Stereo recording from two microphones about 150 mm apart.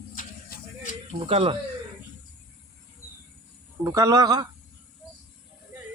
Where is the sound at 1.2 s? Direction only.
40° right (ahead or behind).